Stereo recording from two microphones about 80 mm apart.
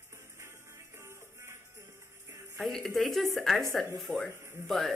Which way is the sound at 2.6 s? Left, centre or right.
Centre.